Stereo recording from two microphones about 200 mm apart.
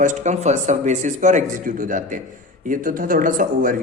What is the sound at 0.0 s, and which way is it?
A man's voice, 40° right (ahead or behind).